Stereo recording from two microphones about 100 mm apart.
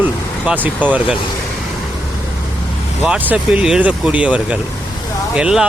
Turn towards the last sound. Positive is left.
turn(degrees=-10)  # may be behind; listen again after turning